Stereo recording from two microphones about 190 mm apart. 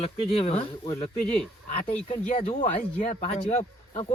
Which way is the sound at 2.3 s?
40° left (ahead or behind).